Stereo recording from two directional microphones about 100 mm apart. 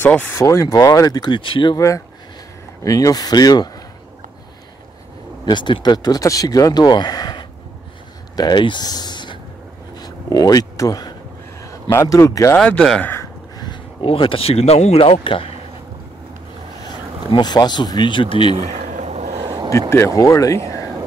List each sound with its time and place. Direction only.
0.0 s speech: 20° left (ahead or behind)
0.4 s speech: 30° left (ahead or behind); by 1.8 s 55° left (ahead or behind)
1.8 s speech: 30° left (ahead or behind)
5.4 s speech: 50° left (ahead or behind)
9.9 s a sound: 40° left (ahead or behind)
11.6 s a man's voice: 30° left (ahead or behind)
12.5 s speech: 5° left (ahead or behind)
13.2 s a sound: 40° left (ahead or behind)
14.0 s speech: 65° left (ahead or behind)
17.3 s speech: 45° left (ahead or behind)
18.5 s a sound: 90° right
19.4 s a sound: 50° right (ahead or behind)
19.9 s speech: 30° left (ahead or behind)